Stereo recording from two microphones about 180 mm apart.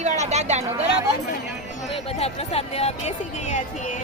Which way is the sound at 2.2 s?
35° left (ahead or behind).